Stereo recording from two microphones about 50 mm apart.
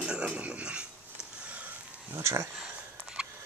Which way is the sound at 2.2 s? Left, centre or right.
Right.